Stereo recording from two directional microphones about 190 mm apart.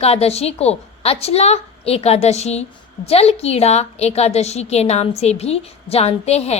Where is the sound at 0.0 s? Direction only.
35° left (ahead or behind).